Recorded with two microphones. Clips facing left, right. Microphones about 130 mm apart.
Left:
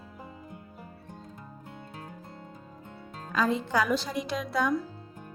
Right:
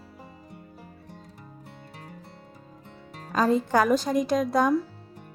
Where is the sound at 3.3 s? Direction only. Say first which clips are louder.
Right 5 dB; 40° right (ahead or behind).